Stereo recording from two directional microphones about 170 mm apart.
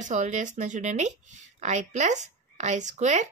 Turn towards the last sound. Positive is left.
turn(degrees=-45)  # may be behind; listen again after turning